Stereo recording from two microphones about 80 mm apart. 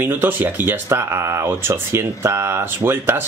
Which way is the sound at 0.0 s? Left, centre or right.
Right.